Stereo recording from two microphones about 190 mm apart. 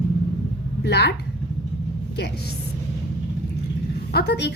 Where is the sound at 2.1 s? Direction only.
60° left (ahead or behind).